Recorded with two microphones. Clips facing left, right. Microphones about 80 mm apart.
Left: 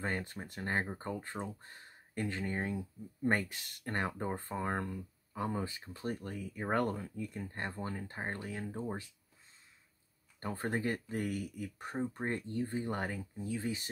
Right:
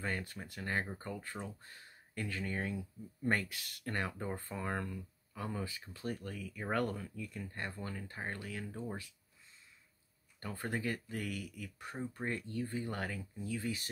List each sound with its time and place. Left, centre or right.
0.0 s speech: left
10.4 s speech: left